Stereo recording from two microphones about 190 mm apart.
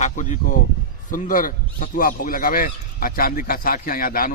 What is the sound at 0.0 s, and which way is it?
A man's voice, 40° left (ahead or behind).